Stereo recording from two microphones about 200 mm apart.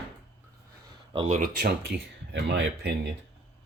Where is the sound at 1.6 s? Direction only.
55° right (ahead or behind).